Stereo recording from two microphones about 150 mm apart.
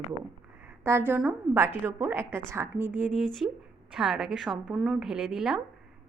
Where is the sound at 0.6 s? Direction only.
15° right (ahead or behind).